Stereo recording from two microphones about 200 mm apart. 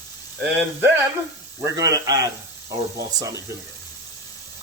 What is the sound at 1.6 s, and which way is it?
Speech, 15° right (ahead or behind).